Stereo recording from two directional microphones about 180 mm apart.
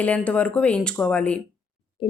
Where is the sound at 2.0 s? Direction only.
30° left (ahead or behind).